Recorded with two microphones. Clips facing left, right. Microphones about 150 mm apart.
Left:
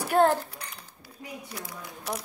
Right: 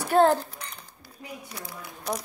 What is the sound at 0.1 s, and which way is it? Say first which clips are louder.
Speech: right 2 dB; 30° right (ahead or behind).